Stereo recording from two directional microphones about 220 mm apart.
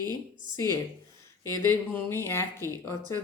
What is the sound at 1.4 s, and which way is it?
Speech, 10° left (ahead or behind).